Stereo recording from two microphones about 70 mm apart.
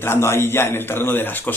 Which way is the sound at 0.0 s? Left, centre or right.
Left.